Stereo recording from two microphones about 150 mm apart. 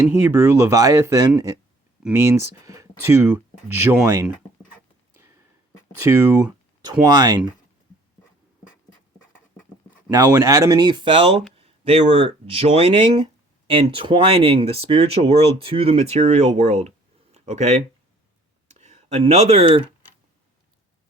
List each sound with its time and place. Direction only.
0.3 s speech: 15° right (ahead or behind)
6.0 s speech: 15° right (ahead or behind)
10.1 s speech: 25° right (ahead or behind)